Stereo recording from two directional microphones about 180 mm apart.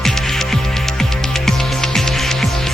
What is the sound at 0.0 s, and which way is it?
Music, centre (ahead or behind).